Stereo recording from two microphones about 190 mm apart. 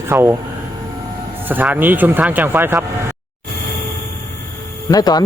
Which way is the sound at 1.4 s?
10° right (ahead or behind).